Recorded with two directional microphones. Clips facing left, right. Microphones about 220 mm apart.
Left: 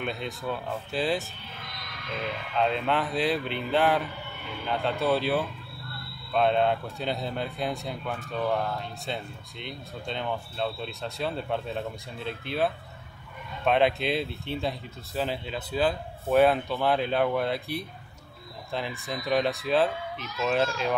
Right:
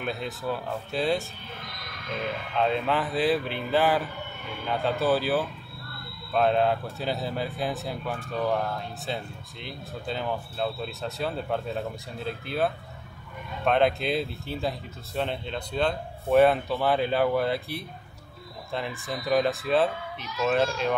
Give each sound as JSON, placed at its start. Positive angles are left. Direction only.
{"t": 0.0, "sound": "speech", "side_deg": 0}
{"t": 2.5, "sound": "speech", "side_deg": 0}